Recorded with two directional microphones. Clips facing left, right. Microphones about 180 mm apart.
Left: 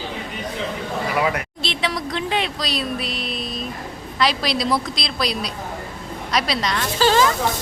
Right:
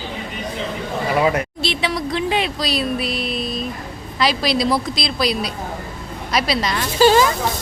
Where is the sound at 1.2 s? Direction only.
25° right (ahead or behind).